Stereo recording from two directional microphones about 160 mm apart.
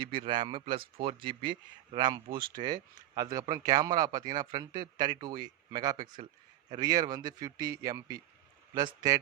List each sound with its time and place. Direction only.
0.0 s speech: 30° right (ahead or behind)